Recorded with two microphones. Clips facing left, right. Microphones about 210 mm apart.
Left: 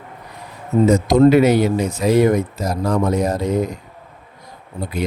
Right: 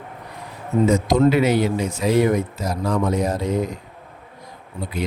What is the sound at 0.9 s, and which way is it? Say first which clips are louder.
Speech: left 5 dB; 40° left (ahead or behind).